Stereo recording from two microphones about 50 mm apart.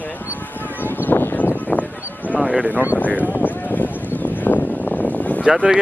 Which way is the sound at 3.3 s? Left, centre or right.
Left.